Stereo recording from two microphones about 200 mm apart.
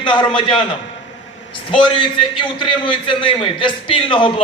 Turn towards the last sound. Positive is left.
turn(degrees=25)  # may be behind; listen again after turning